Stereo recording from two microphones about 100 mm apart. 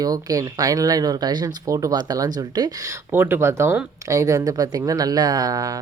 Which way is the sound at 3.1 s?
25° right (ahead or behind).